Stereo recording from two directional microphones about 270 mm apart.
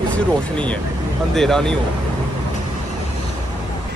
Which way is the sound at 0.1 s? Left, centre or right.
Centre.